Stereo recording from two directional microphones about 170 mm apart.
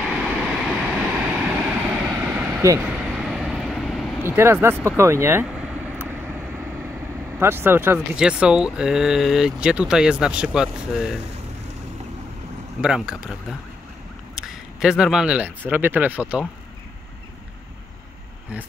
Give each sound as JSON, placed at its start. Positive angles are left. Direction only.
{"t": 0.1, "sound": "vehicle", "side_deg": 0}
{"t": 4.4, "sound": "speech", "side_deg": -15}
{"t": 7.3, "sound": "speech", "side_deg": -15}
{"t": 12.8, "sound": "speech", "side_deg": -5}